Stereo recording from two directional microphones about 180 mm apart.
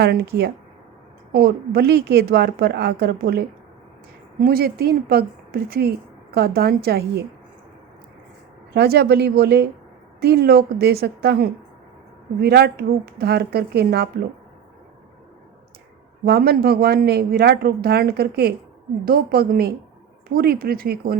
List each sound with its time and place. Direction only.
0.0 s a woman's voice: 65° right (ahead or behind)
8.7 s a woman's voice: 65° right (ahead or behind)
16.2 s a woman's voice: 60° right (ahead or behind)